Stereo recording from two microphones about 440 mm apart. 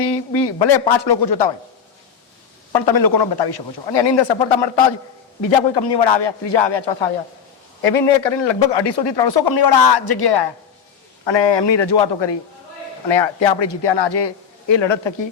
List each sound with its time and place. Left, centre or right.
0.0 s a man's voice: left
1.0 s a man's voice: left
2.7 s a man's voice: left
5.4 s a man's voice: left
5.8 s a man's voice: left
7.8 s a man's voice: left
11.3 s a man's voice: left
13.1 s a man's voice: left